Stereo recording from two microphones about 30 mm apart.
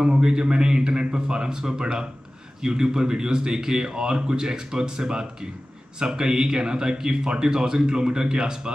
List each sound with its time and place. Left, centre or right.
0.2 s a man's voice: right